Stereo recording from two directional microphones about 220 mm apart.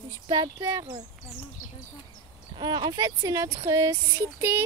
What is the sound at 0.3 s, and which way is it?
Speech, 20° right (ahead or behind).